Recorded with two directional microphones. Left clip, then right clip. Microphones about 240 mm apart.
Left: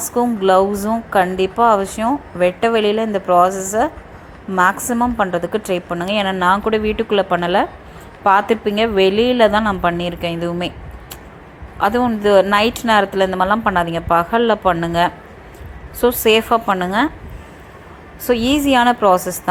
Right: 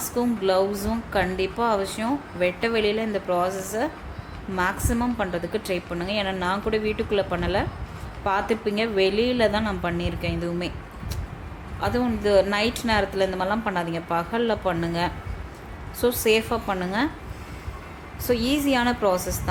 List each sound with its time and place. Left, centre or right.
0.1 s a woman's voice: centre
11.8 s a woman's voice: centre
18.3 s a woman's voice: centre